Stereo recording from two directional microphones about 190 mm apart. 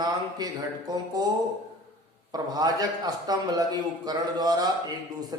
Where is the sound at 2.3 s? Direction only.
20° right (ahead or behind).